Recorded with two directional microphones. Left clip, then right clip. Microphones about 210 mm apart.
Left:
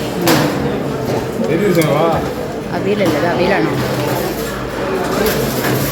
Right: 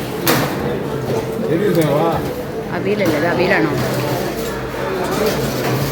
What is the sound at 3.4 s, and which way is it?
Speech, centre (ahead or behind).